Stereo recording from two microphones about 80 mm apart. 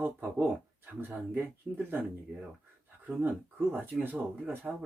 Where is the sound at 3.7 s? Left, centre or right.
Right.